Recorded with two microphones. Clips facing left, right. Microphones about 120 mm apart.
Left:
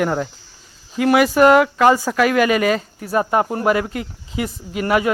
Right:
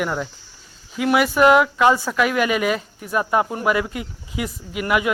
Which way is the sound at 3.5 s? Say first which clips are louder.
Left 3 dB; 30° left (ahead or behind).